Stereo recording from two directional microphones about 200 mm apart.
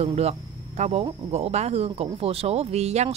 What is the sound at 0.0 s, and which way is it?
A woman's voice, 30° right (ahead or behind).